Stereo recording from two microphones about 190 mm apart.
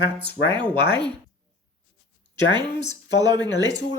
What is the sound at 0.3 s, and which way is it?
Speech, 25° right (ahead or behind).